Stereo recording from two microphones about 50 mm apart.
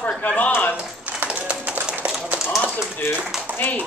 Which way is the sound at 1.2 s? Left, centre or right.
Right.